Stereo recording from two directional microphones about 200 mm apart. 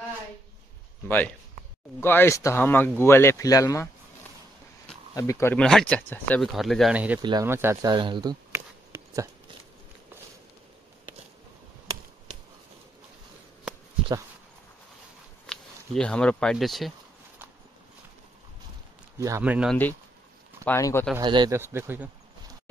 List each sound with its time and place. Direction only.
1.0 s speech: 10° left (ahead or behind)
7.2 s speech: 20° right (ahead or behind)
15.4 s speech: 5° left (ahead or behind)
19.1 s speech: 15° right (ahead or behind)
19.7 s speech: 10° left (ahead or behind)
21.2 s speech: 20° right (ahead or behind)
21.5 s speech: 10° right (ahead or behind)